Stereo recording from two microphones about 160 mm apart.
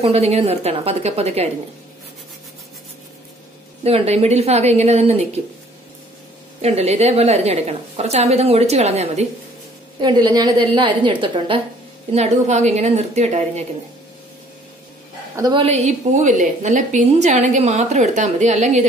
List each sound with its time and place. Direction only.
0.0 s a woman's voice: 40° right (ahead or behind)
3.8 s a woman's voice: 40° right (ahead or behind)
6.6 s a woman's voice: 40° right (ahead or behind)
10.0 s a woman's voice: 25° right (ahead or behind)
12.1 s a woman's voice: 45° right (ahead or behind)
15.3 s a woman's voice: 25° right (ahead or behind)
15.6 s a woman's voice: 45° right (ahead or behind)